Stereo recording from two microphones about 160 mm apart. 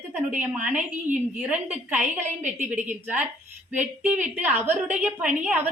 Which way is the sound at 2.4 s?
50° right (ahead or behind).